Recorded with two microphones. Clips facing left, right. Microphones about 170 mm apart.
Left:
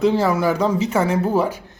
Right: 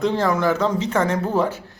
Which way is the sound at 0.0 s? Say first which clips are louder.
Left 2 dB; 10° left (ahead or behind).